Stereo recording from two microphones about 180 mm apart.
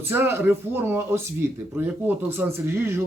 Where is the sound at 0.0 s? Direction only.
15° right (ahead or behind).